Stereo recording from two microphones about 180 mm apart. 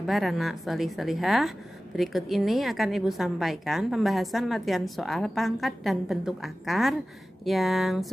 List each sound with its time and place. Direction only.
0.0 s a woman's voice: centre (ahead or behind)